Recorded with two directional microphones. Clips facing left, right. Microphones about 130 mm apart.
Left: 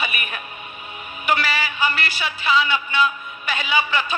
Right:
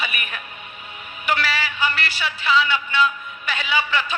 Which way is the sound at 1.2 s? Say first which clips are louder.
Left 1 dB; 15° left (ahead or behind).